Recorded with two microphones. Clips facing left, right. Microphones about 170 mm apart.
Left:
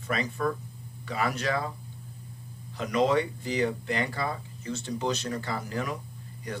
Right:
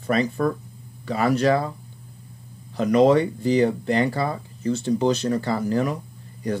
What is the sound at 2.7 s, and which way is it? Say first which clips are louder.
Speech: right 8 dB; 35° right (ahead or behind).